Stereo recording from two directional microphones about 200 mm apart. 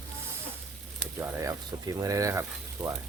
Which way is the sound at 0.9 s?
10° right (ahead or behind).